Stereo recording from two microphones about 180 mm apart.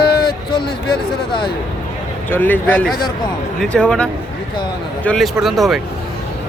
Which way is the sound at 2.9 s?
20° left (ahead or behind).